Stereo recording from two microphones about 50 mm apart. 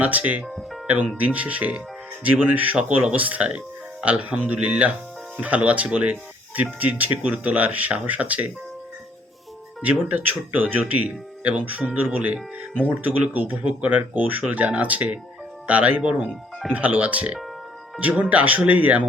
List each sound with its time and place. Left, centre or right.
0.0 s speech: right
0.4 s speech: centre
0.9 s speech: right
9.8 s speech: right
16.3 s speech: centre
16.7 s speech: right